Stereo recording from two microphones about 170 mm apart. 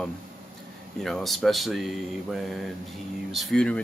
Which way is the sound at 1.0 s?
Centre (ahead or behind).